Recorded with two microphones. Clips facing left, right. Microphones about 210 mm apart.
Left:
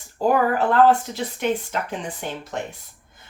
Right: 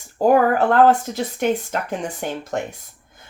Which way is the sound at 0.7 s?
45° right (ahead or behind).